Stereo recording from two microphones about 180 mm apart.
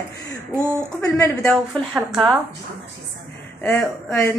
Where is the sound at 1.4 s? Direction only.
Centre (ahead or behind).